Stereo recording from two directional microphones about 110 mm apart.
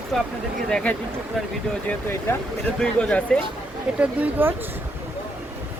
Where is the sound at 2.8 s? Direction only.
10° left (ahead or behind).